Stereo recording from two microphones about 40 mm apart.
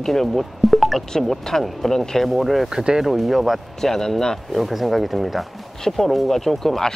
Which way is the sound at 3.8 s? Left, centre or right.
Centre.